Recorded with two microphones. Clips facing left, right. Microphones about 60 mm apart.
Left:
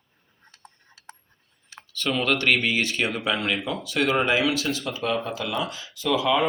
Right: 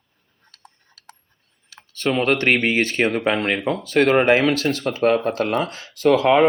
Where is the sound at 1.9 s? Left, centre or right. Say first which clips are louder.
Right 5 dB; right.